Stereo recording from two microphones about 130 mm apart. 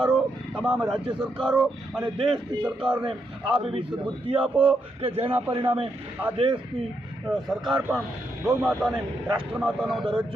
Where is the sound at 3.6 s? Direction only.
45° right (ahead or behind).